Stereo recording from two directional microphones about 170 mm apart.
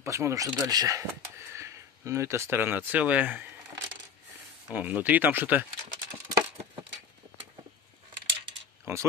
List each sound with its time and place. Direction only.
0.0 s speech: 15° right (ahead or behind)
6.6 s a sound: 30° right (ahead or behind)
8.9 s oink: 15° right (ahead or behind)